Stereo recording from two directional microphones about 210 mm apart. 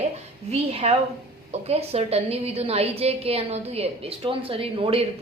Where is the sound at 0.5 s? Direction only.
30° right (ahead or behind).